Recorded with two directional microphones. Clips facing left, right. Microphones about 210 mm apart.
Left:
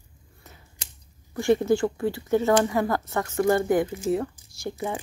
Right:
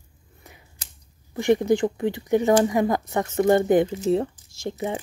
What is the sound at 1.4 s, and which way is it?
Speech, 20° right (ahead or behind).